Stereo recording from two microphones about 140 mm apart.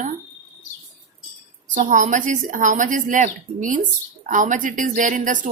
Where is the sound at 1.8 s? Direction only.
70° right (ahead or behind).